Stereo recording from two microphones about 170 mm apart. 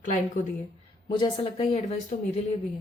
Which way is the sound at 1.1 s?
25° left (ahead or behind).